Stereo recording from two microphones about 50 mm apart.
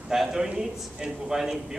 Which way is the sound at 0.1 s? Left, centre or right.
Centre.